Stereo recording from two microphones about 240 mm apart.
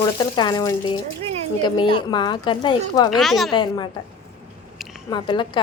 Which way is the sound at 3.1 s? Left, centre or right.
Centre.